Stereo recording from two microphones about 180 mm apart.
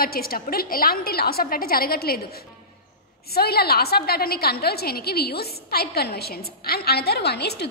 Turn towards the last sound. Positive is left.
turn(degrees=65)  # may be behind; listen again after turning